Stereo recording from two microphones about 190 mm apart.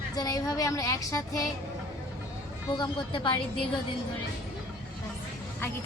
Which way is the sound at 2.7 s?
25° left (ahead or behind).